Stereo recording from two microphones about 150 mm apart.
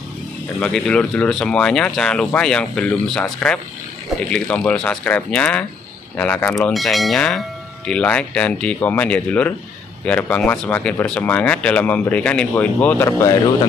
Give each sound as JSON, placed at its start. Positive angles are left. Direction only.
{"t": 0.6, "sound": "speech", "side_deg": 5}